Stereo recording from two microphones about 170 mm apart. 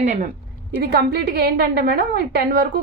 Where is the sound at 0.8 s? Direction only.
70° right (ahead or behind).